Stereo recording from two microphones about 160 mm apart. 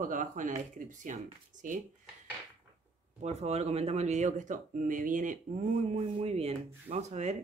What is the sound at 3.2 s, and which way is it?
Speech, 45° right (ahead or behind).